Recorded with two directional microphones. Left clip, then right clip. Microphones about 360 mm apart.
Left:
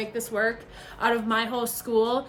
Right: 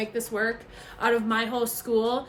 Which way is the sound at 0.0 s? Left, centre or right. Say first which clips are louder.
Left 1 dB; centre.